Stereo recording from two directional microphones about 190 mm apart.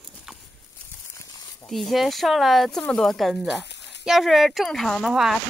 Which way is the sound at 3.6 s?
65° left (ahead or behind).